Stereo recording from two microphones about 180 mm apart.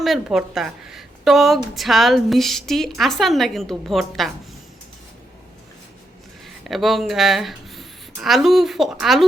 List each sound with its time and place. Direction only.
0.0 s a woman's voice: centre (ahead or behind)
6.7 s a woman's voice: centre (ahead or behind)